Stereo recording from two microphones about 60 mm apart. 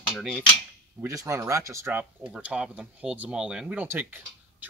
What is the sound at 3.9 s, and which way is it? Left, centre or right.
Speech, right.